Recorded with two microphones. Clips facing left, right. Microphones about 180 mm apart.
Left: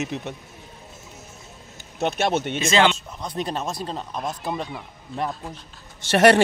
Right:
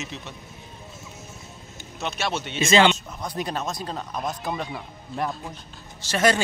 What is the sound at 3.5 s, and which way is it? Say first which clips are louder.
Speech: left 1 dB; 30° left (ahead or behind).